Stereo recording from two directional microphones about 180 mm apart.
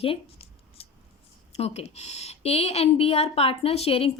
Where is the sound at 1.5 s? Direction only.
35° left (ahead or behind).